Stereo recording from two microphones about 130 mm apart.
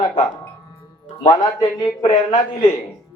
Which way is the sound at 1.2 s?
40° left (ahead or behind).